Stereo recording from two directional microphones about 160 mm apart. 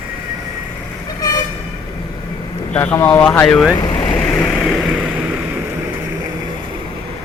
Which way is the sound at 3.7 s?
25° left (ahead or behind).